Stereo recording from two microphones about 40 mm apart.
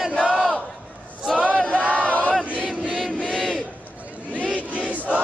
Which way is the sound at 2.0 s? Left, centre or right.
Left.